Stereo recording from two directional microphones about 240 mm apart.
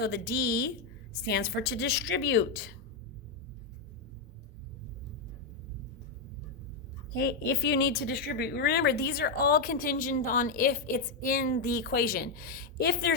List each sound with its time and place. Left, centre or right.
0.0 s a woman's voice: left
7.2 s a woman's voice: left